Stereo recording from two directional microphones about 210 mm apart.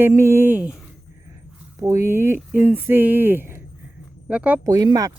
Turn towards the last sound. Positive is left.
turn(degrees=-20)  # may be behind; listen again after turning